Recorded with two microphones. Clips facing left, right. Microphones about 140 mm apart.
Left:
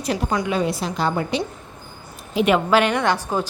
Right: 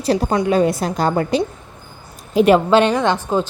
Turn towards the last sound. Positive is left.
turn(degrees=-20)  # may be behind; listen again after turning